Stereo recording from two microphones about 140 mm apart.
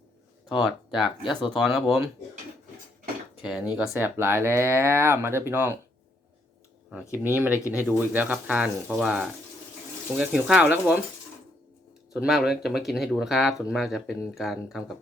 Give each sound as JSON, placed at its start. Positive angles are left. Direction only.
{"t": 0.4, "sound": "speech", "side_deg": 0}
{"t": 3.4, "sound": "speech", "side_deg": -5}
{"t": 7.0, "sound": "speech", "side_deg": 20}
{"t": 7.3, "sound": "speech", "side_deg": -15}
{"t": 12.1, "sound": "speech", "side_deg": 0}